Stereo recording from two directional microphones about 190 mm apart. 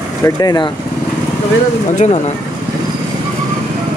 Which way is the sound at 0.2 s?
20° left (ahead or behind).